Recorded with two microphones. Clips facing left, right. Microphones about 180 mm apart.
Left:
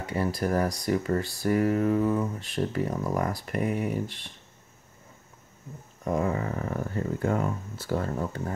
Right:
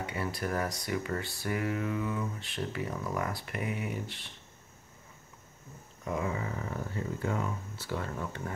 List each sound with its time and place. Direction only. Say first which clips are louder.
0.0 s speech: left 6 dB; 40° left (ahead or behind)
6.0 s speech: left 6 dB; 45° left (ahead or behind)